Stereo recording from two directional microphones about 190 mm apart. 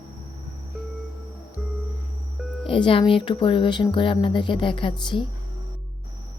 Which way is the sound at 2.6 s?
25° left (ahead or behind).